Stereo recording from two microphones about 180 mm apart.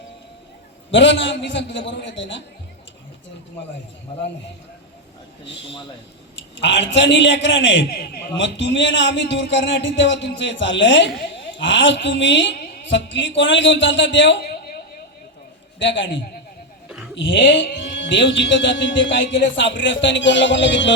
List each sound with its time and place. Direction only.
0.9 s a man's voice: 85° left
6.3 s a man's voice: 80° left; by 14.8 s 60° left (ahead or behind)
15.8 s a man's voice: 80° left